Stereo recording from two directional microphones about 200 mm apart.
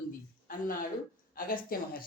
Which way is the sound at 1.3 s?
45° left (ahead or behind).